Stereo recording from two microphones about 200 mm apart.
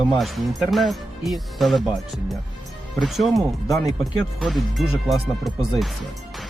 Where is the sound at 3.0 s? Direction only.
Centre (ahead or behind).